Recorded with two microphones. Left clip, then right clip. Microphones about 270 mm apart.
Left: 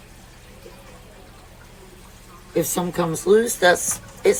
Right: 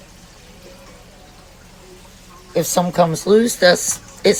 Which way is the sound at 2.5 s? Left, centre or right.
Right.